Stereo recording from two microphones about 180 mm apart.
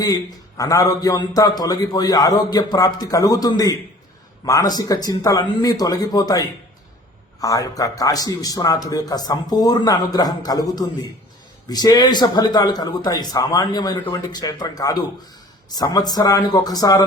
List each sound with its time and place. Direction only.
0.0 s a man's voice: 20° left (ahead or behind)